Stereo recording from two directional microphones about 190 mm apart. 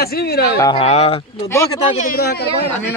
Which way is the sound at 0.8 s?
35° left (ahead or behind).